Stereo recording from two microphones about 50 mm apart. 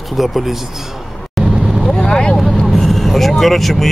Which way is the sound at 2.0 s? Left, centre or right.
Centre.